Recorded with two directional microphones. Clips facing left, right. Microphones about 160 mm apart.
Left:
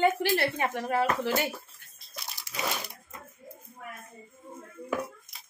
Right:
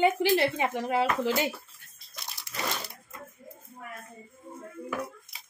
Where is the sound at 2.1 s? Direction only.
Centre (ahead or behind).